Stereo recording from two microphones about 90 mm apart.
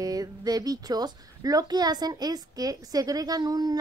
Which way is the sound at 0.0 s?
45° right (ahead or behind).